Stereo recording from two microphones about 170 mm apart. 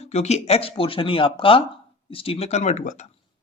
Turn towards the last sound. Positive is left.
turn(degrees=45)  # may be behind; listen again after turning